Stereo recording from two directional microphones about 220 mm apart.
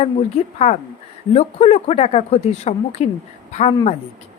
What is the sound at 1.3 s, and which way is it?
Speech, 30° left (ahead or behind).